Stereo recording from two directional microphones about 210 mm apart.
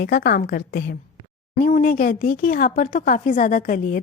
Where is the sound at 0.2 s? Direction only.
50° left (ahead or behind).